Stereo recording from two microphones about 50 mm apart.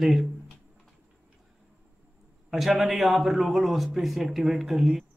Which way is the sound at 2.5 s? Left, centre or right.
Centre.